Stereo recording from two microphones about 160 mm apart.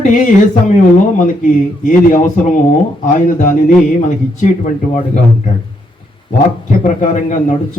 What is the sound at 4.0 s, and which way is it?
Speech, 50° left (ahead or behind).